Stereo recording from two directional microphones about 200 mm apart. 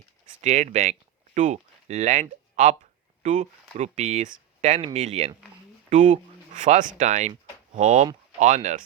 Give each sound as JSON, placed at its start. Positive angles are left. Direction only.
{"t": 0.4, "sound": "speech", "side_deg": -35}
{"t": 3.2, "sound": "speech", "side_deg": -35}